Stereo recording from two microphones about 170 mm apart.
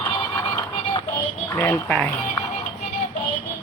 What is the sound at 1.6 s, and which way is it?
Speech, 10° left (ahead or behind).